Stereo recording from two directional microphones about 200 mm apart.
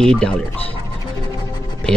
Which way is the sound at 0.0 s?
5° left (ahead or behind).